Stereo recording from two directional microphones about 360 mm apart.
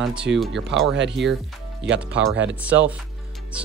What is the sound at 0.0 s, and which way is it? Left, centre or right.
Speech, centre.